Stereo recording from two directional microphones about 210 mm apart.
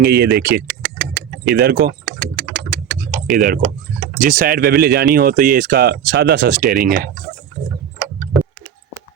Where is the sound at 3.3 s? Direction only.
45° right (ahead or behind).